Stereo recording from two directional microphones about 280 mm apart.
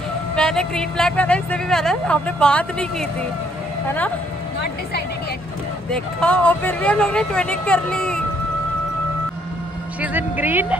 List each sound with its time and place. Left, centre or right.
0.4 s speech: centre
5.9 s speech: centre
10.0 s speech: centre